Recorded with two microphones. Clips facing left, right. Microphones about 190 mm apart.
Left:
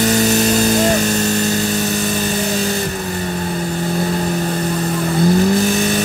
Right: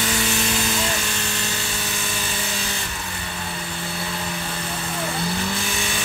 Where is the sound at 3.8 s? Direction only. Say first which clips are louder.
Left 11 dB; 40° left (ahead or behind).